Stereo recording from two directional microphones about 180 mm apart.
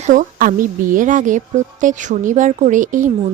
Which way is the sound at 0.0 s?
45° right (ahead or behind).